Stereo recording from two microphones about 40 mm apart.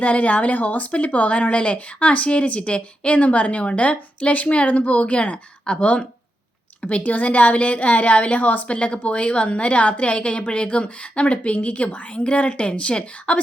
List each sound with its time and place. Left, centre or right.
0.0 s speech: left
6.8 s speech: left